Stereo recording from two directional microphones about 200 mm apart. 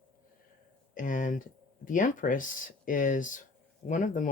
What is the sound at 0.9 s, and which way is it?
Speech, 40° left (ahead or behind).